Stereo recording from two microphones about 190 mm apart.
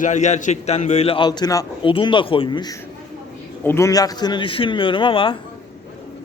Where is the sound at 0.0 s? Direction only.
40° left (ahead or behind).